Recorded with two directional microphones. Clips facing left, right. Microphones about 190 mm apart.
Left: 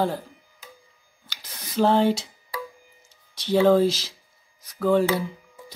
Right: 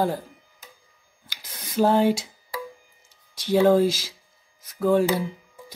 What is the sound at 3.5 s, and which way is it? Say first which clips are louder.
Speech: even; 10° right (ahead or behind).